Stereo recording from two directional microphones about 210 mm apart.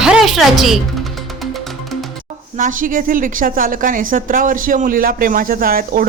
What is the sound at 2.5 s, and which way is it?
A woman's voice, 40° right (ahead or behind).